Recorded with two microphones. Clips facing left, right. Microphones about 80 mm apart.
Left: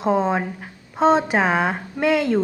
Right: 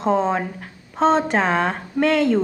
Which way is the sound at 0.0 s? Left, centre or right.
Centre.